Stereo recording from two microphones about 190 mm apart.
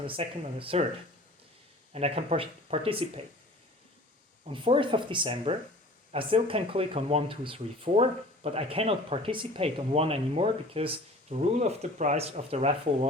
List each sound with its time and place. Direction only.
0.1 s speech: 30° right (ahead or behind)
1.9 s speech: 35° right (ahead or behind)
4.4 s speech: 25° right (ahead or behind)